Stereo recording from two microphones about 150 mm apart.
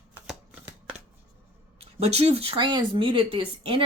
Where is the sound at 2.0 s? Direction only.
45° right (ahead or behind).